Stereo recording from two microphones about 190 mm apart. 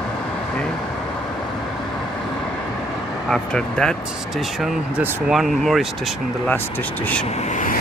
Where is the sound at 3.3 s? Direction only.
5° left (ahead or behind).